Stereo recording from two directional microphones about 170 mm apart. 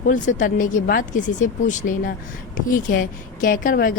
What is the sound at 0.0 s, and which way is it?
A woman's voice, 50° left (ahead or behind).